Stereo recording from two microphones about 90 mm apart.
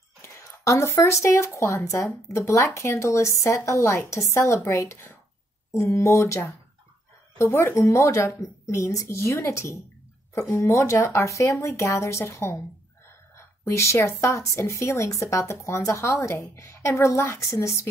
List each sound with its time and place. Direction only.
0.2 s a woman's voice: 30° left (ahead or behind)